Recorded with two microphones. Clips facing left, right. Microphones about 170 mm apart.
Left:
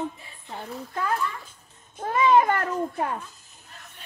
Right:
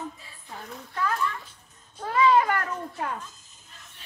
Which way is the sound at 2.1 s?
20° left (ahead or behind).